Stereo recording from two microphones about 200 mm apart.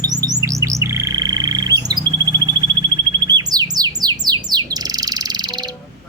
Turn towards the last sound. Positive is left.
turn(degrees=-20)  # may be behind; listen again after turning